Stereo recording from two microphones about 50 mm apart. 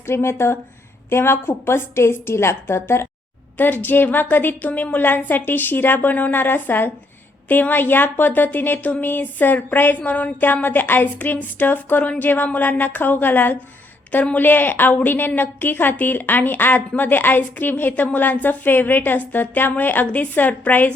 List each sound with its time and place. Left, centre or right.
0.1 s a woman's voice: left
3.6 s a woman's voice: left